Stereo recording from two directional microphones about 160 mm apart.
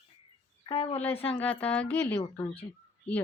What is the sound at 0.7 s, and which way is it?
Speech, 35° left (ahead or behind).